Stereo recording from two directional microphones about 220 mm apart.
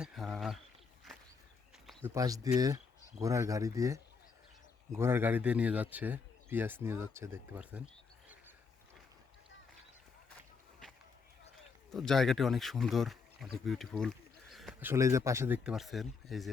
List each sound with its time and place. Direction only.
0.0 s speech: centre (ahead or behind)
1.1 s walk: centre (ahead or behind)
2.0 s speech: 15° right (ahead or behind)
11.5 s speech: centre (ahead or behind)